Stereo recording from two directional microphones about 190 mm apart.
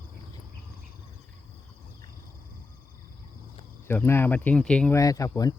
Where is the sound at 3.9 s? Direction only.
10° left (ahead or behind).